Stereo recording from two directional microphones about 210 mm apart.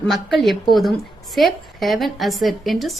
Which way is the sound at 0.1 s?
Centre (ahead or behind).